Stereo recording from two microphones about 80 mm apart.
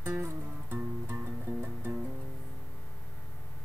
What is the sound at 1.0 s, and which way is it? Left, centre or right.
Music, centre.